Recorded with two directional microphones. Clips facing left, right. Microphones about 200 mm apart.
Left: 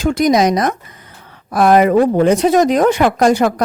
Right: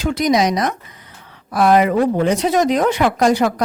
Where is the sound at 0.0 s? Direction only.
45° left (ahead or behind).